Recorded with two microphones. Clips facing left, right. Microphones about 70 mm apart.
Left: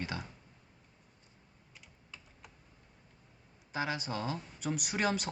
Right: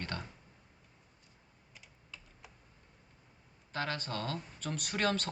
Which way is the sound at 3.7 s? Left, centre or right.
Centre.